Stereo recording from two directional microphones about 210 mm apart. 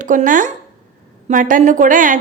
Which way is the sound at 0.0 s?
40° right (ahead or behind).